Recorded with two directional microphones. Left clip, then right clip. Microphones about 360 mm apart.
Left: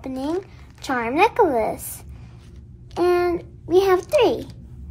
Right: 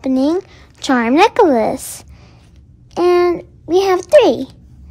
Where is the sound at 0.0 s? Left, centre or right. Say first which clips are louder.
Right 10 dB; right.